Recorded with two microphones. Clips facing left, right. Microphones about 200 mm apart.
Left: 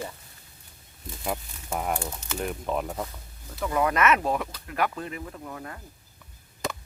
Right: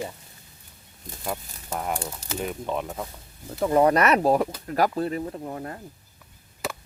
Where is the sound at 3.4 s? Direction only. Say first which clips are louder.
Right 7 dB; 35° right (ahead or behind).